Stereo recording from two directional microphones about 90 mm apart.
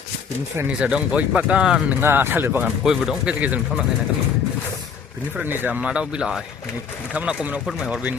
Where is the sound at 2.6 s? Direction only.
5° right (ahead or behind).